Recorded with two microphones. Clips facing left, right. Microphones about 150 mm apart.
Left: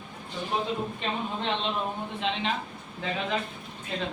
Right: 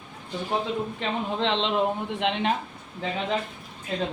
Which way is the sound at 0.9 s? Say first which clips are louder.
Right 4 dB; 90° right.